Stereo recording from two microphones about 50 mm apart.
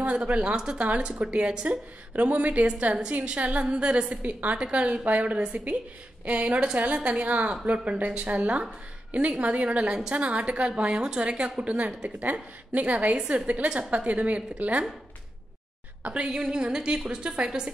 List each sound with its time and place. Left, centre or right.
0.0 s a woman's voice: right
4.6 s a woman's voice: centre
4.8 s a woman's voice: right
16.0 s a woman's voice: right